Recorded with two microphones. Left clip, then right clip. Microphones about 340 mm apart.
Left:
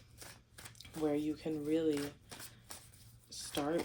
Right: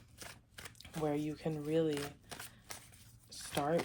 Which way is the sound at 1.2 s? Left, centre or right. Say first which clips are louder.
Left 2 dB; right.